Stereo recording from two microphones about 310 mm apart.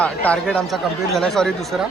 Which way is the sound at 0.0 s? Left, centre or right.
Centre.